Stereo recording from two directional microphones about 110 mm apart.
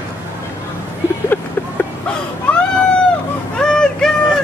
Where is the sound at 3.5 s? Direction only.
5° left (ahead or behind).